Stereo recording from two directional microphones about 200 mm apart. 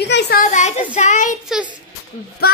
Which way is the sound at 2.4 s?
50° left (ahead or behind).